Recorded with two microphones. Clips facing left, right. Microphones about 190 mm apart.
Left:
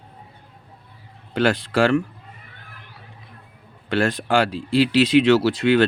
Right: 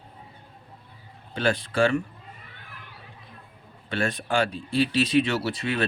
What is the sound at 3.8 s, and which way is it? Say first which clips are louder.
Speech: left 7 dB; 90° left.